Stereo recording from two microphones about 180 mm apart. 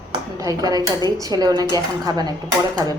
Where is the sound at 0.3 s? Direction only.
20° right (ahead or behind).